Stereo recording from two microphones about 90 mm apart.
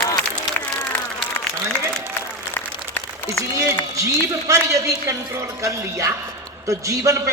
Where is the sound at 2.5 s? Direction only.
30° left (ahead or behind).